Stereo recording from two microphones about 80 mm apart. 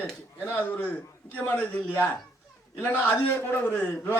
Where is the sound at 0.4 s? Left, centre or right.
Left.